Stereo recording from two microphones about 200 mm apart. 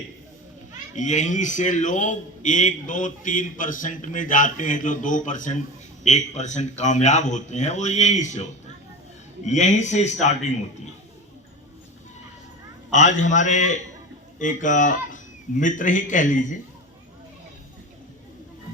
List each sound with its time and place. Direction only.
0.7 s a man's voice: 35° left (ahead or behind)
9.5 s a man's voice: 35° left (ahead or behind)
12.9 s a man's voice: 40° left (ahead or behind)